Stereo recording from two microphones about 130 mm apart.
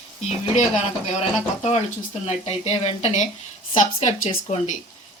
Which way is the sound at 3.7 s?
75° left (ahead or behind).